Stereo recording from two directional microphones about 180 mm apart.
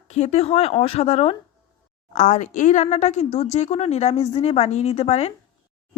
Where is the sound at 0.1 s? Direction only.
35° left (ahead or behind).